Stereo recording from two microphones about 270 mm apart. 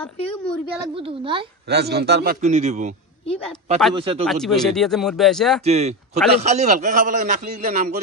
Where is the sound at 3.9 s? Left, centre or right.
Right.